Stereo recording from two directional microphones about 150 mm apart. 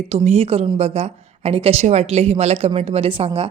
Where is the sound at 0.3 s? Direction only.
45° right (ahead or behind).